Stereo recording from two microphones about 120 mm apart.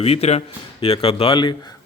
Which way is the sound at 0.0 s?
60° left (ahead or behind).